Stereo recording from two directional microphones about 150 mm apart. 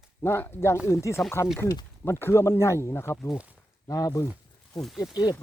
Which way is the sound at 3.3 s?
5° right (ahead or behind).